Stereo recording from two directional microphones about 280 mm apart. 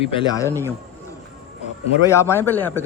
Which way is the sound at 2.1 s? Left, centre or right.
Centre.